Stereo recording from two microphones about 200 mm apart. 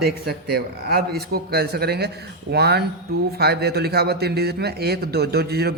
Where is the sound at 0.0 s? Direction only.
50° right (ahead or behind).